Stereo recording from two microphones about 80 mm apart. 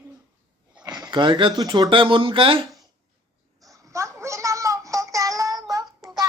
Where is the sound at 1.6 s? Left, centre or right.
Right.